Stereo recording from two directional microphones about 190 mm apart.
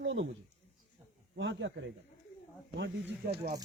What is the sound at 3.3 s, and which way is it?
Speech, 55° right (ahead or behind).